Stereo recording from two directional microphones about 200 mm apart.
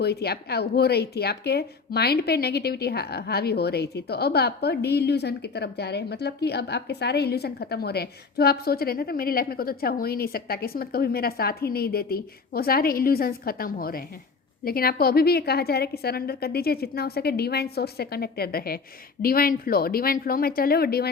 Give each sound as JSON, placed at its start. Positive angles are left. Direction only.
{"t": 0.0, "sound": "speech", "side_deg": 55}